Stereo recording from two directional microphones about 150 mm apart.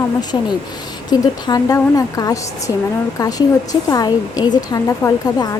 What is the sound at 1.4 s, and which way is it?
A woman's voice, 25° left (ahead or behind).